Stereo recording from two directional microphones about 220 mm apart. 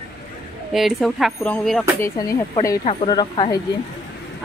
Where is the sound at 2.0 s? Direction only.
15° left (ahead or behind).